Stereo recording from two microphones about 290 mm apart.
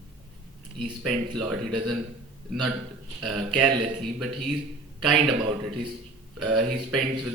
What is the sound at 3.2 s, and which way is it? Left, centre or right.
Speech, centre.